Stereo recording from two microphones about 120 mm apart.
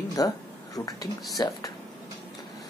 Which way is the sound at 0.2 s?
30° left (ahead or behind).